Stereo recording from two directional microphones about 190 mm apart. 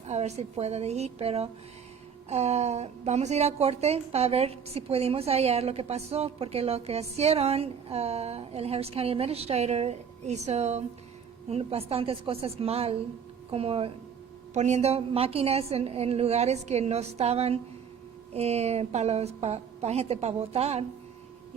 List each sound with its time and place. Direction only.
0.0 s a woman's voice: 35° right (ahead or behind)